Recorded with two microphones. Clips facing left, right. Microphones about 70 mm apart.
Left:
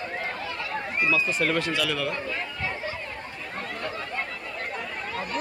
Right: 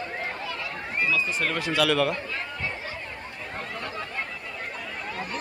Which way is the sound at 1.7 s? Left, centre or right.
Right.